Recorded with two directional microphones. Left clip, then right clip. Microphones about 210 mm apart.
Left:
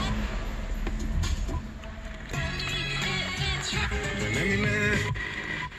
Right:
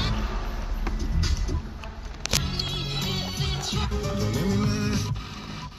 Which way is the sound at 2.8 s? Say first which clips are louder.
Left 1 dB; 45° right (ahead or behind).